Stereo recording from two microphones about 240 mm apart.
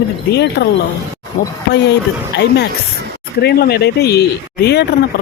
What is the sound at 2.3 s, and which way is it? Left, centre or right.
Speech, left.